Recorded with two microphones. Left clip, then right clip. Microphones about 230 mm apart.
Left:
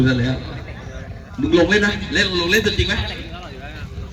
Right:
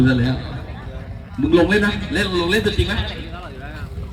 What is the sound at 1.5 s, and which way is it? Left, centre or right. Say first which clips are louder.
A man's voice: left 1 dB; right.